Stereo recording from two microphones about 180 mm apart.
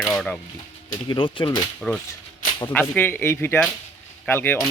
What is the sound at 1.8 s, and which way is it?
Speech, 5° left (ahead or behind).